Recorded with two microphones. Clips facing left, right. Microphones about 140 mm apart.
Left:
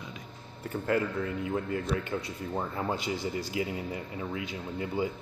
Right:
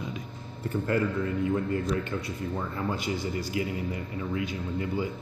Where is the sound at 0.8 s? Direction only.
10° left (ahead or behind).